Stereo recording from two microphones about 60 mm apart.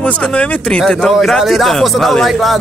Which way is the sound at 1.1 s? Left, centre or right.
Centre.